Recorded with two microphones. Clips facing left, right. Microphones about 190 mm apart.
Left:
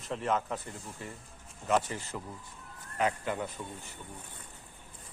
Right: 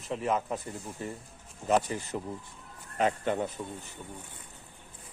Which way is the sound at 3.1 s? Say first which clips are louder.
Right 5 dB; 40° right (ahead or behind).